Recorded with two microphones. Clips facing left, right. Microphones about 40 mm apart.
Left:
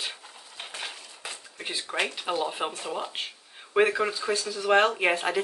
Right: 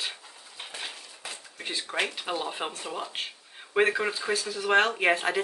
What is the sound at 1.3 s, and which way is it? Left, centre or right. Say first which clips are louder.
Dishes: left 1 dB; centre.